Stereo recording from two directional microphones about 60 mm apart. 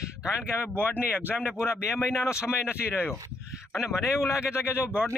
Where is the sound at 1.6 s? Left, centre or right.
Left.